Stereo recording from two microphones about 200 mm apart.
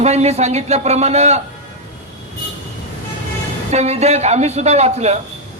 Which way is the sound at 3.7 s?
35° right (ahead or behind).